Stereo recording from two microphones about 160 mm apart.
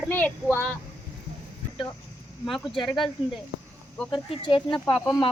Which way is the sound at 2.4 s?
Centre (ahead or behind).